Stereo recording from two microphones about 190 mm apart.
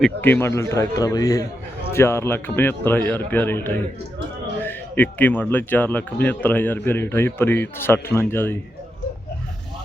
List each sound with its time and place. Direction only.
0.0 s a man's voice: 10° left (ahead or behind)